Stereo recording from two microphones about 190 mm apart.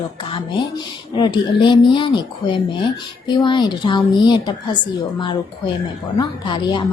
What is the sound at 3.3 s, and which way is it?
A woman's voice, 25° left (ahead or behind).